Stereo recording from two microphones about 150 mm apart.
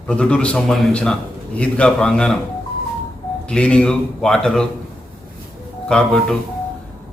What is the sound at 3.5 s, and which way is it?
A man's voice, 5° left (ahead or behind).